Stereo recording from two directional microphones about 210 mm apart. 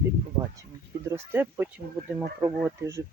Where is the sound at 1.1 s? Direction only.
10° right (ahead or behind).